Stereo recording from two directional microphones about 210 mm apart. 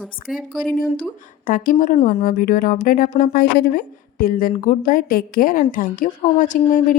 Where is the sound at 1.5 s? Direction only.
40° left (ahead or behind).